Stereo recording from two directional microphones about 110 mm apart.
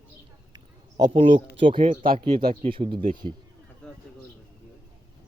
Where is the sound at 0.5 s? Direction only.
40° right (ahead or behind).